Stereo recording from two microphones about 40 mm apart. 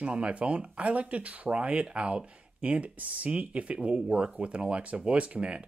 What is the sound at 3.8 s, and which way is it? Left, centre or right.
Speech, centre.